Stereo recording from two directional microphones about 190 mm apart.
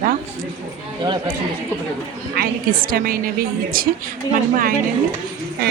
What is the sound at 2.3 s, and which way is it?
Speech, 50° right (ahead or behind).